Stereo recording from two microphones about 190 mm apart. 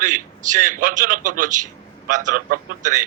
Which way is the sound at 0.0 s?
40° right (ahead or behind).